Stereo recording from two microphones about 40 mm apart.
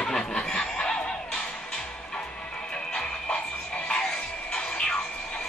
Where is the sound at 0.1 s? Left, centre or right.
Centre.